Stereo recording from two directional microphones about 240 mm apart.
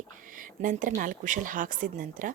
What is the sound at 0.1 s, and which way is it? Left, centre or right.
A woman's voice, right.